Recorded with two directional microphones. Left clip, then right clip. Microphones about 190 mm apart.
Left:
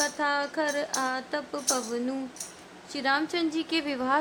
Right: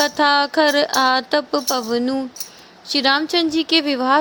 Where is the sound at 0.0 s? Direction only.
40° right (ahead or behind).